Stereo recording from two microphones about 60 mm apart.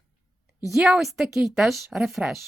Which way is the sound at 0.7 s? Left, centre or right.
Centre.